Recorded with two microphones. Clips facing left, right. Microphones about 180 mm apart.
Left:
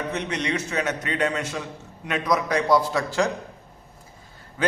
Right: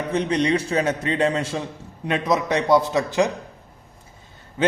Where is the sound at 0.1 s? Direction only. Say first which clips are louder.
Right 6 dB; 30° right (ahead or behind).